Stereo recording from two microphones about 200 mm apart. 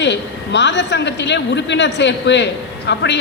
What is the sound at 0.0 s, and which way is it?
A man's voice, 60° left (ahead or behind).